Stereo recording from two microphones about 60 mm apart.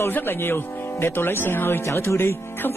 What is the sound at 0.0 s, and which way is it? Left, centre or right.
Speech, left.